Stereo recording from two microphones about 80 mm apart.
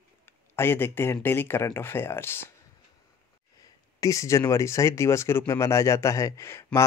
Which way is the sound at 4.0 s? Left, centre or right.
Left.